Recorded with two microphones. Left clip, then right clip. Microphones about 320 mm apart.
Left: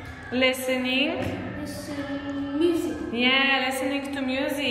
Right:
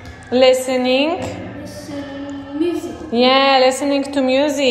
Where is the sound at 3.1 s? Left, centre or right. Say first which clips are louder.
Right 10 dB; centre.